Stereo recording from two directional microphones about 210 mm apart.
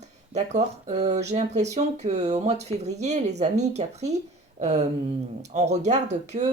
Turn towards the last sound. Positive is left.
turn(degrees=-35)  # may be behind; listen again after turning